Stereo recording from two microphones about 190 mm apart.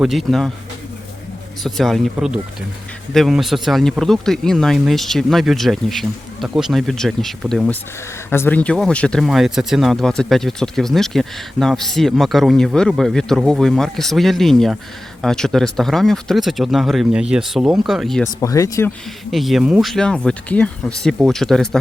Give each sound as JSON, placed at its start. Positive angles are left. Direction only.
{"t": 0.0, "sound": "speech", "side_deg": 0}
{"t": 1.6, "sound": "speech", "side_deg": 0}
{"t": 18.3, "sound": "speech", "side_deg": 15}
{"t": 19.3, "sound": "speech", "side_deg": 0}